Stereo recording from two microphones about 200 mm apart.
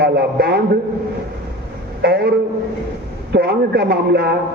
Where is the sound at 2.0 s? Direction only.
55° right (ahead or behind).